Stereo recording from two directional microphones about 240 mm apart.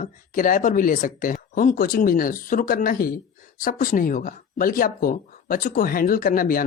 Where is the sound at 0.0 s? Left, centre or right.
Left.